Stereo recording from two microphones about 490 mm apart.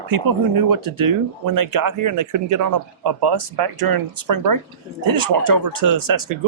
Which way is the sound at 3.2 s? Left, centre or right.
Right.